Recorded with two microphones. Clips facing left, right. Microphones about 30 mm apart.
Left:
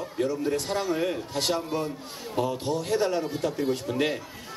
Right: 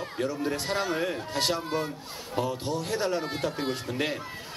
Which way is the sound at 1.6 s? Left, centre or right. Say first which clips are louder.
Left 1 dB; right.